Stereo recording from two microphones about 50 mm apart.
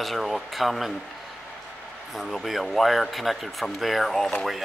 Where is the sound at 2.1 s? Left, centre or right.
Centre.